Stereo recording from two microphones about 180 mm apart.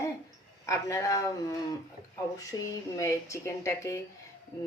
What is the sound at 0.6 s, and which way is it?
Speech, 20° left (ahead or behind).